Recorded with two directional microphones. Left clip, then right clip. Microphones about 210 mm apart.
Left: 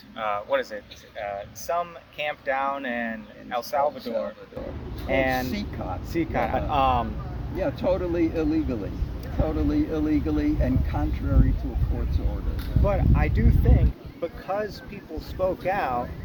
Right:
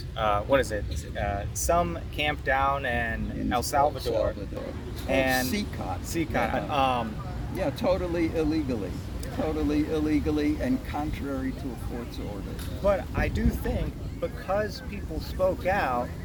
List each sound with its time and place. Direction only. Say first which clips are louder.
0.2 s speech: right 2 dB; 20° left (ahead or behind)
5.5 s speech: even; 15° right (ahead or behind)
6.1 s speech: left 2 dB; 15° left (ahead or behind)
7.6 s speech: left 2 dB; 15° right (ahead or behind)
12.8 s speech: right 1 dB; 15° left (ahead or behind)